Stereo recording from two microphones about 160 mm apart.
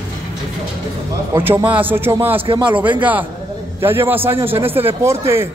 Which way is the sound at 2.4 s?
30° right (ahead or behind).